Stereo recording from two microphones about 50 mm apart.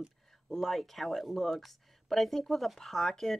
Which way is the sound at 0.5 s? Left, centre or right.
Centre.